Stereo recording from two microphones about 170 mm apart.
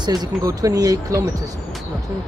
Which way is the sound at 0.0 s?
25° right (ahead or behind).